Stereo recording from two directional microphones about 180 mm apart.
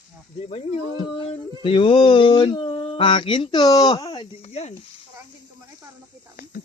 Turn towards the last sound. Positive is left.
turn(degrees=35)  # may be behind; listen again after turning